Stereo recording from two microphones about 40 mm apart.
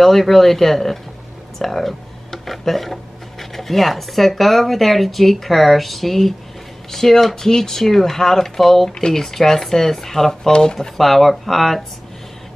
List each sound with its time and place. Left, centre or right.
0.0 s speech: centre
11.0 s speech: centre